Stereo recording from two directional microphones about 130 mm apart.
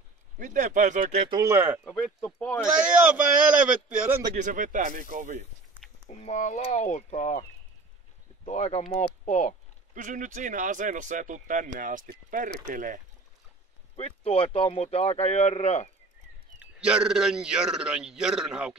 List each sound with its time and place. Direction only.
0.4 s speech: 75° right (ahead or behind)
1.3 s speech: 20° right (ahead or behind)
1.9 s a man's voice: 5° left (ahead or behind)
2.6 s a man's voice: 10° right (ahead or behind)
4.4 s speech: 80° right
6.0 s speech: 65° left (ahead or behind)
8.5 s speech: 60° left (ahead or behind)
9.2 s speech: 70° left (ahead or behind)
9.9 s speech: 80° right
13.9 s speech: 50° left (ahead or behind)
16.5 s a man's voice: 10° right (ahead or behind)